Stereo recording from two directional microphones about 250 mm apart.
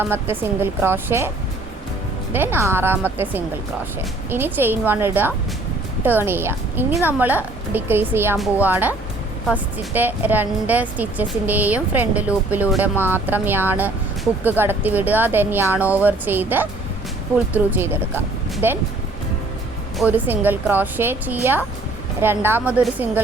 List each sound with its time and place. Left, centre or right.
0.0 s speech: centre
2.3 s speech: centre
20.0 s speech: centre